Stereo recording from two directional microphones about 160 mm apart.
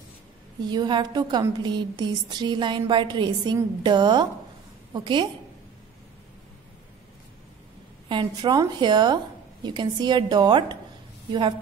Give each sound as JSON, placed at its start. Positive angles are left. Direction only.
{"t": 0.7, "sound": "a woman's voice", "side_deg": -30}
{"t": 8.1, "sound": "a woman's voice", "side_deg": -30}